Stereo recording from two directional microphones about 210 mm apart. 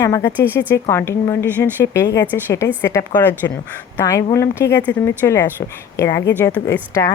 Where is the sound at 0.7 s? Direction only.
10° left (ahead or behind).